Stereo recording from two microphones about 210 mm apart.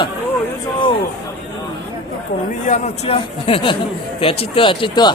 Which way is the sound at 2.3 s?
40° left (ahead or behind).